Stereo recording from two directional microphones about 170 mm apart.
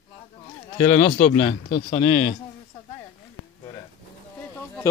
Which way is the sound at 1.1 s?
55° left (ahead or behind).